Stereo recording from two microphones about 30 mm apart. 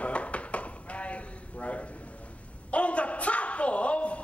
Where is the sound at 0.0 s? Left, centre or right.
Left.